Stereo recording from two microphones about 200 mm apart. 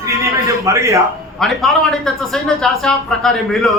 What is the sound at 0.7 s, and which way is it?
Speech, 15° right (ahead or behind).